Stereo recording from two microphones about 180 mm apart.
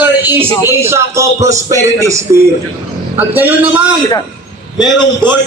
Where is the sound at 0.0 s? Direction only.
10° right (ahead or behind).